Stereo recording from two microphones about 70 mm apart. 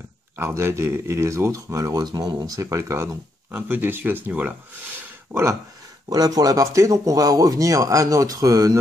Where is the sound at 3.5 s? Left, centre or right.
Right.